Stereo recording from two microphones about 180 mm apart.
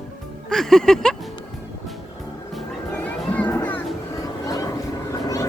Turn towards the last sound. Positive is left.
turn(degrees=20)  # may be behind; listen again after turning